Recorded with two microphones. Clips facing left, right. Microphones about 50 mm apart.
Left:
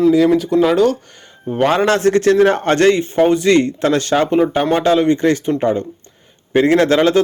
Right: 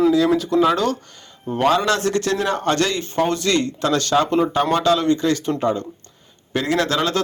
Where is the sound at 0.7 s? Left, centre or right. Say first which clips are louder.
Left 7 dB; centre.